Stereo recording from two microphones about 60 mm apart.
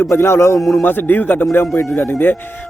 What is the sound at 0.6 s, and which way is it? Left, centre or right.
Speech, centre.